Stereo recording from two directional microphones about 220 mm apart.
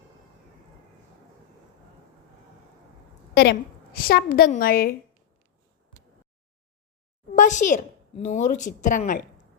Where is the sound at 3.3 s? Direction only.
45° left (ahead or behind).